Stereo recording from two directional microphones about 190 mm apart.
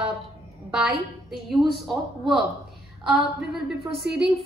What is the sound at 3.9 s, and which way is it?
Speech, 5° right (ahead or behind).